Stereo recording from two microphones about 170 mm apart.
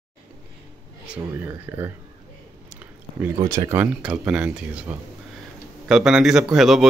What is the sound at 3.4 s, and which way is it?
Speech, 20° right (ahead or behind).